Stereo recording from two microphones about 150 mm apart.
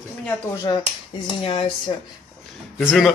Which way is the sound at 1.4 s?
35° left (ahead or behind).